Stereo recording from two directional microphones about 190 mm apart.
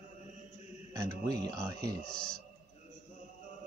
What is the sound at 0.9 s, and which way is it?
Speech, 15° right (ahead or behind).